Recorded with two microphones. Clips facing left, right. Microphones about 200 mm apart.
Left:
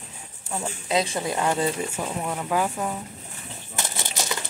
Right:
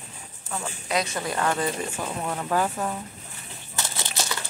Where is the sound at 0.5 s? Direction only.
20° left (ahead or behind).